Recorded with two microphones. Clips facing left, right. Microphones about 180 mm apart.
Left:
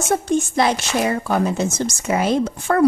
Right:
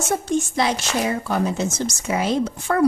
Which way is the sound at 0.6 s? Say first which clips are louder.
Left 3 dB; 55° left (ahead or behind).